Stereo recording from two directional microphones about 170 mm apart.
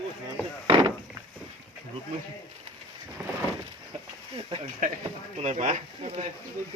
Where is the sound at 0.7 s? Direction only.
30° right (ahead or behind).